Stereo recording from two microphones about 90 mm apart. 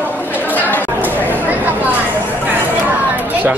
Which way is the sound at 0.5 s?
20° left (ahead or behind).